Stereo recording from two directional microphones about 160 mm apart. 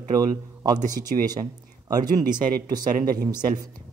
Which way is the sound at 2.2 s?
25° right (ahead or behind).